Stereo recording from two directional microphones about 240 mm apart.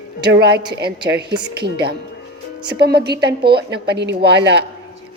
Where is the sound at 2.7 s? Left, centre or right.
Right.